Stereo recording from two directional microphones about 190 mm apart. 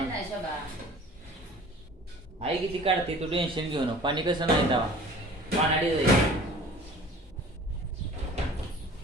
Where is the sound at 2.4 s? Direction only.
30° right (ahead or behind).